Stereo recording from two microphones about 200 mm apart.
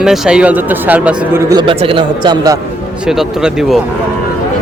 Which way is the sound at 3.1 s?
Centre (ahead or behind).